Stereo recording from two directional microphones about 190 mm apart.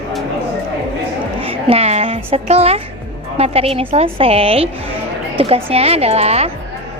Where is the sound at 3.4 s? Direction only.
30° right (ahead or behind).